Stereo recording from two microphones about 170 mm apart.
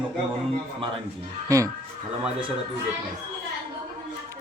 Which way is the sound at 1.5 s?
20° right (ahead or behind).